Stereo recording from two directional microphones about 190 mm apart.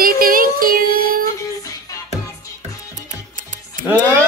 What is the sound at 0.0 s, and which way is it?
Child singing, 50° right (ahead or behind).